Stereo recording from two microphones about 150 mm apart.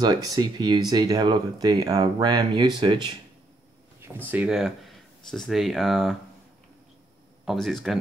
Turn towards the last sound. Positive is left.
turn(degrees=0)  # may be behind; listen again after turning